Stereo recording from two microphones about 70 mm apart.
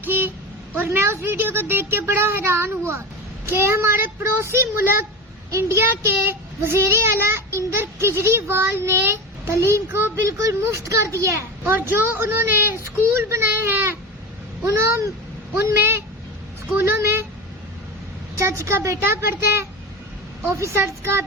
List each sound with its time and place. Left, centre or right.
0.0 s a sound: right
0.9 s a child's voice: right
11.6 s a child's voice: right
18.3 s a woman's voice: right
20.6 s a child's voice: right